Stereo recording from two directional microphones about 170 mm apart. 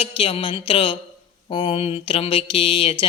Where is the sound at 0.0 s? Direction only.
35° left (ahead or behind).